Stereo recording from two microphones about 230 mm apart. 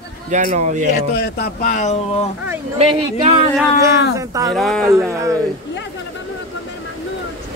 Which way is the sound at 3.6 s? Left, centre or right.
Centre.